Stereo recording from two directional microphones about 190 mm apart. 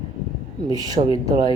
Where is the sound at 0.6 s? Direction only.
20° right (ahead or behind).